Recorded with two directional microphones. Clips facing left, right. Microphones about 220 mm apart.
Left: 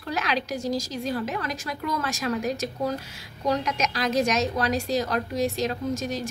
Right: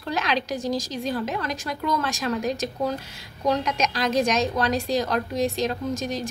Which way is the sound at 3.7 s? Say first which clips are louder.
Right 1 dB; 5° left (ahead or behind).